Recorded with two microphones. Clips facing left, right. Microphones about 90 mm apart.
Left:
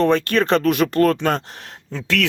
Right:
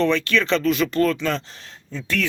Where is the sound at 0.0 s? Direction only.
45° left (ahead or behind).